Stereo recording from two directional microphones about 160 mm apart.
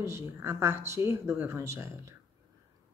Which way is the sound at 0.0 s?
15° right (ahead or behind).